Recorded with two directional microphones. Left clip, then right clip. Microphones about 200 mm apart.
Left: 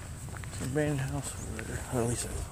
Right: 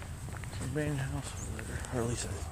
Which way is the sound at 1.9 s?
20° left (ahead or behind).